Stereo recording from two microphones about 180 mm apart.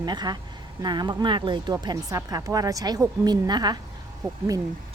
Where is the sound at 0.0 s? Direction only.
25° right (ahead or behind).